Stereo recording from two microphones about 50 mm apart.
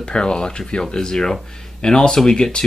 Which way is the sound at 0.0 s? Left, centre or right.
Centre.